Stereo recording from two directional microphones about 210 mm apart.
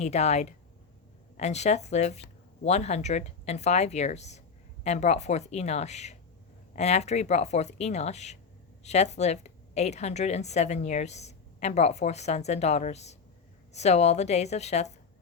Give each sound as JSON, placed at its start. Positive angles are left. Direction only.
{"t": 0.0, "sound": "a woman's voice", "side_deg": 30}